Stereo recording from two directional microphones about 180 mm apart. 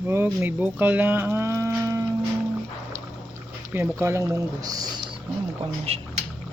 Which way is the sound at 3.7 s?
10° right (ahead or behind).